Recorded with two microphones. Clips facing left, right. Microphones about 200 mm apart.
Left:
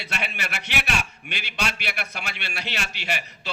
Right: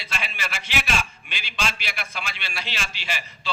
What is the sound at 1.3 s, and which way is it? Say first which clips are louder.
A man's voice: left 1 dB; 65° left (ahead or behind).